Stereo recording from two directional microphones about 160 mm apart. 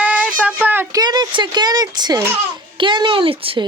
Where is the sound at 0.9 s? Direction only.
25° right (ahead or behind).